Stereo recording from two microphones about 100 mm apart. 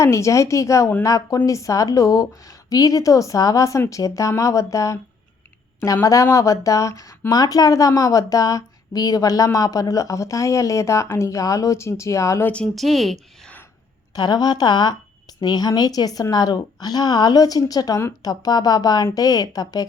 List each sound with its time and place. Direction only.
0.0 s speech: 30° left (ahead or behind)
12.7 s speech: centre (ahead or behind)
14.2 s a woman's voice: 40° left (ahead or behind)